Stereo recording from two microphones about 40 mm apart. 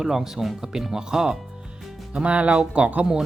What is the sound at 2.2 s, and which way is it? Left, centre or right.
Speech, right.